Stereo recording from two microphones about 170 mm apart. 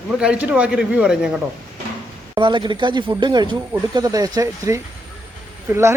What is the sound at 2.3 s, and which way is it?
Speech, 25° right (ahead or behind).